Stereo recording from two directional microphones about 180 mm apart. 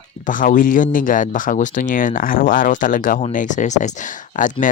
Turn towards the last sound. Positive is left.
turn(degrees=45)  # may be behind; listen again after turning